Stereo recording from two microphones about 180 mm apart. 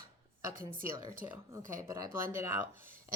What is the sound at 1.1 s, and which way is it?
Speech, 15° right (ahead or behind).